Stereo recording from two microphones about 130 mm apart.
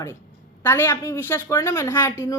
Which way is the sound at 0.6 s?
20° left (ahead or behind).